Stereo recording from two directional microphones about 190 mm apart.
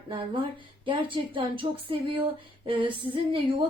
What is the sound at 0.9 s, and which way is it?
Speech, 25° right (ahead or behind).